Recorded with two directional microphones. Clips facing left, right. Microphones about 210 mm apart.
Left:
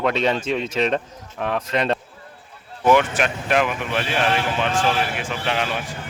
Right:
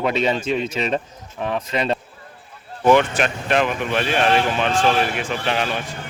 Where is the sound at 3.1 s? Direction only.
5° left (ahead or behind).